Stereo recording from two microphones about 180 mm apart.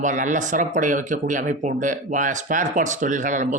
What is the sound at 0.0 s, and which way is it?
Speech, 45° right (ahead or behind).